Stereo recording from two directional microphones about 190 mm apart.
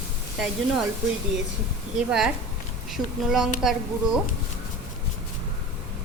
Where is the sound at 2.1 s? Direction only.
5° right (ahead or behind).